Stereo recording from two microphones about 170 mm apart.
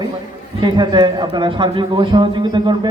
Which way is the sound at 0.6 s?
25° right (ahead or behind).